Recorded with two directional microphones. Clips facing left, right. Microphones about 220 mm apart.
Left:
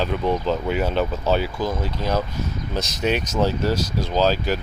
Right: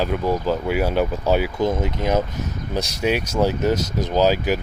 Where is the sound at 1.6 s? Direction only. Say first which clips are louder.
Right 4 dB; 25° right (ahead or behind).